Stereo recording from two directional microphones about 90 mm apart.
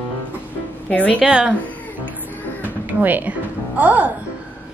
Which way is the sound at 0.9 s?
15° left (ahead or behind).